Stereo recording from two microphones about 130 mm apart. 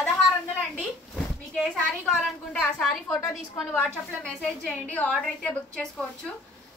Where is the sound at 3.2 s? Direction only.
20° left (ahead or behind).